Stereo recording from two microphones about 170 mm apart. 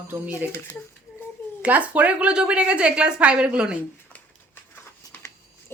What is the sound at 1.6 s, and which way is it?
A woman's voice, 10° right (ahead or behind).